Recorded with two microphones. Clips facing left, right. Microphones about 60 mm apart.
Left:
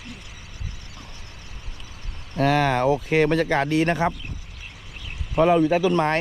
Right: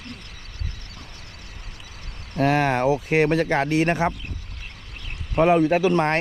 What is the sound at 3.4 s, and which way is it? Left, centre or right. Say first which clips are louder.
Speech: even; right.